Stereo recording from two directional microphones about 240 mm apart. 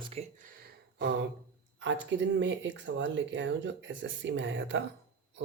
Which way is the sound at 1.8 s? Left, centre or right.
Right.